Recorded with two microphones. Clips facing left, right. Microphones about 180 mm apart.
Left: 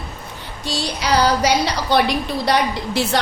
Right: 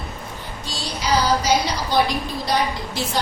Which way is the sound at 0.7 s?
70° left (ahead or behind).